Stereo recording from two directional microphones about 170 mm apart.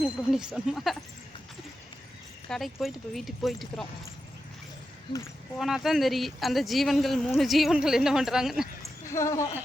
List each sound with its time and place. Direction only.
0.0 s speech: centre (ahead or behind)
2.5 s speech: 5° left (ahead or behind)
5.5 s speech: centre (ahead or behind)
9.0 s speech: 15° left (ahead or behind)